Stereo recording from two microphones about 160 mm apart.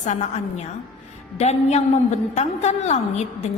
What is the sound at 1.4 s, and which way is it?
A woman's voice, 45° left (ahead or behind).